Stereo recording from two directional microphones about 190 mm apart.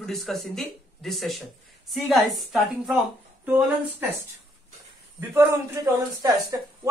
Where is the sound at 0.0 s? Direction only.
Centre (ahead or behind).